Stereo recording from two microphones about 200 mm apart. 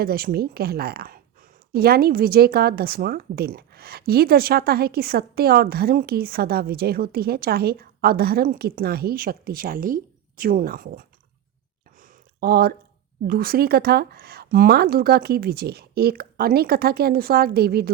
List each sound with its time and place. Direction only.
0.0 s a woman's voice: 50° right (ahead or behind)
11.9 s a sound: 45° right (ahead or behind)
13.2 s a woman's voice: 50° right (ahead or behind)